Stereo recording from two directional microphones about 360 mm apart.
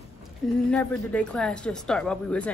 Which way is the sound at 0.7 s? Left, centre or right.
Centre.